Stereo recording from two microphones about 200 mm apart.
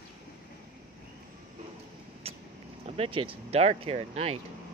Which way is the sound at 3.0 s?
25° right (ahead or behind).